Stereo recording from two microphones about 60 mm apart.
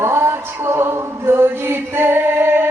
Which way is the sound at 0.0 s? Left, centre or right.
Right.